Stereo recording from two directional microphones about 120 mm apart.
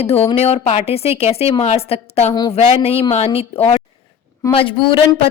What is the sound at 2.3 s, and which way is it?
Speech, 35° left (ahead or behind).